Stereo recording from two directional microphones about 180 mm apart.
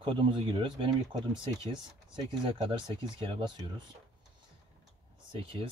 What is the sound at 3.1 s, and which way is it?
Speech, 25° right (ahead or behind).